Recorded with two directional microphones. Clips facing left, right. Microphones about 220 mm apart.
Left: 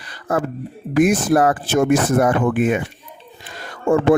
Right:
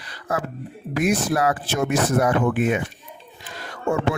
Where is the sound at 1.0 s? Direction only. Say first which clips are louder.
Left 6 dB; 50° left (ahead or behind).